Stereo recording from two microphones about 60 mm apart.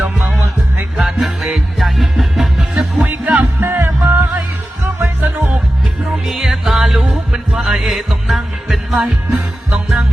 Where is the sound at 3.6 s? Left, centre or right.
Right.